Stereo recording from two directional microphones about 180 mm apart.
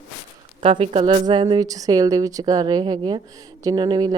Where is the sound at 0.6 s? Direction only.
30° right (ahead or behind).